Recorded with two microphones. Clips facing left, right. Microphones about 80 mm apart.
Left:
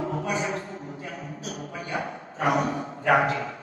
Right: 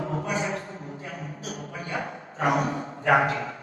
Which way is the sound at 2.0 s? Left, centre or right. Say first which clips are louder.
Even; right.